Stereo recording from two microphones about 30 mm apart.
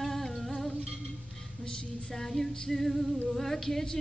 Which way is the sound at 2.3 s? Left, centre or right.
Centre.